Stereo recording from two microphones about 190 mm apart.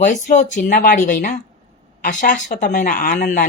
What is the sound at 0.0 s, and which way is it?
Speech, 40° left (ahead or behind).